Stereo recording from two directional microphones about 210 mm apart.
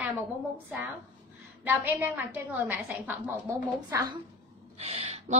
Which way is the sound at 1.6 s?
10° right (ahead or behind).